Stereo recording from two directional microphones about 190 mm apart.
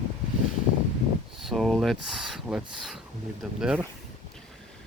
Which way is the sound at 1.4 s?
Centre (ahead or behind).